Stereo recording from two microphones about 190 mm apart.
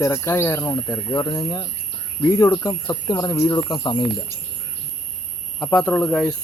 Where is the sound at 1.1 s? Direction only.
20° left (ahead or behind).